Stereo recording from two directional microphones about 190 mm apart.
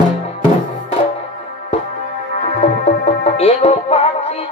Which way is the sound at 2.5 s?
35° left (ahead or behind).